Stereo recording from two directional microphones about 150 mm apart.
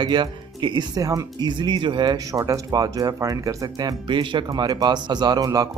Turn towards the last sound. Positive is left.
turn(degrees=-25)  # may be behind; listen again after turning